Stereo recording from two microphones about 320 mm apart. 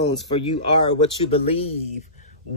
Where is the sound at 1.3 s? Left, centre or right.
Centre.